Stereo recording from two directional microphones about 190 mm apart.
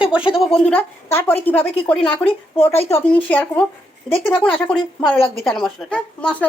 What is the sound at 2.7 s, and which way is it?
Speech, 30° left (ahead or behind).